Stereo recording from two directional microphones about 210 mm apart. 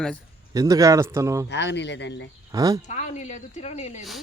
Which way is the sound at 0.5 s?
15° right (ahead or behind).